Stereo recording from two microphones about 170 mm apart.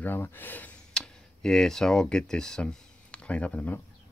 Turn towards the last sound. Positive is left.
turn(degrees=10)  # may be behind; listen again after turning